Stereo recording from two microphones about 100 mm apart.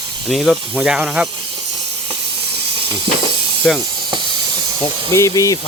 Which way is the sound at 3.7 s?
5° left (ahead or behind).